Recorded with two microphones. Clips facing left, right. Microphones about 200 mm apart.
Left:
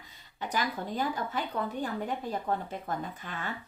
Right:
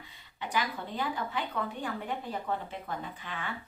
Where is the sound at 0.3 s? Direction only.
40° left (ahead or behind).